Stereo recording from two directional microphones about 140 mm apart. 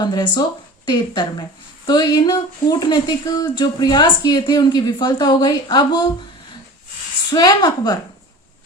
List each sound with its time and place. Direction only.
0.0 s speech: 30° left (ahead or behind)
7.3 s a woman's voice: 30° left (ahead or behind)